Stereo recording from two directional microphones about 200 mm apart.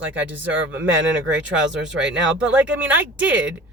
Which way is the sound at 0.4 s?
70° right (ahead or behind).